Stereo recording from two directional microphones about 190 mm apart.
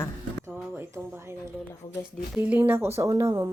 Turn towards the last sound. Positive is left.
turn(degrees=-20)  # may be behind; listen again after turning